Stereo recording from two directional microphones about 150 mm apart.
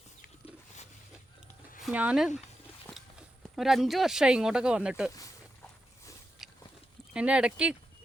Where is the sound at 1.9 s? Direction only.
10° right (ahead or behind).